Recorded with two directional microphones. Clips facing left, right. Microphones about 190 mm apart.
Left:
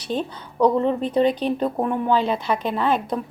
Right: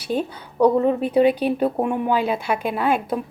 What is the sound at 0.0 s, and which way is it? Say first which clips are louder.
Speech: right 2 dB; 10° right (ahead or behind).